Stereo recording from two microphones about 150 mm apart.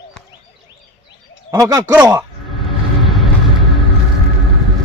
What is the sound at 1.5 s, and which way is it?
Speech, 25° right (ahead or behind).